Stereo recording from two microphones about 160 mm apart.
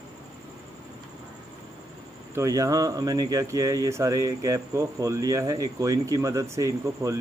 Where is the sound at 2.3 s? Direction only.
20° right (ahead or behind).